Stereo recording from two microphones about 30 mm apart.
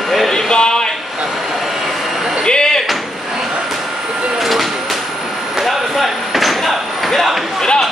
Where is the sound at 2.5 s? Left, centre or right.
Left.